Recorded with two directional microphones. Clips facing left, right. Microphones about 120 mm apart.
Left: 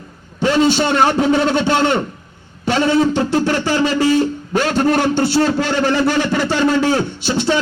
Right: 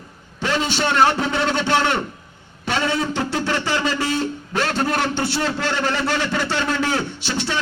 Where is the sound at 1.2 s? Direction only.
40° left (ahead or behind).